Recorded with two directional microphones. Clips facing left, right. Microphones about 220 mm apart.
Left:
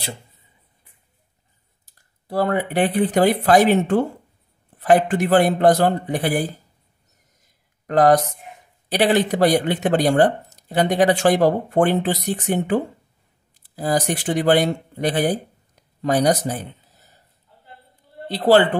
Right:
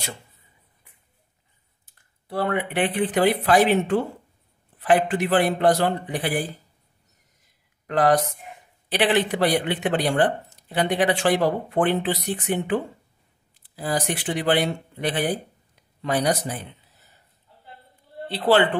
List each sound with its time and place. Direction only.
1.9 s speech: 40° left (ahead or behind)
7.8 s speech: 45° left (ahead or behind)
18.3 s speech: 40° left (ahead or behind)